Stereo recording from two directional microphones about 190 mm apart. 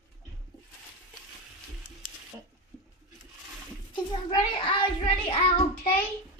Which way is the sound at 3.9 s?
25° left (ahead or behind).